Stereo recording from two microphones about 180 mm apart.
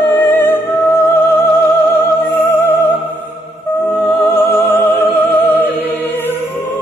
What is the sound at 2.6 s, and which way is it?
Music, 10° left (ahead or behind).